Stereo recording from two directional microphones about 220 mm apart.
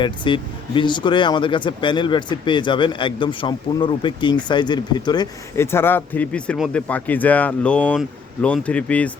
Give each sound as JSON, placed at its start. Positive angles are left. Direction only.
{"t": 0.0, "sound": "speech", "side_deg": 20}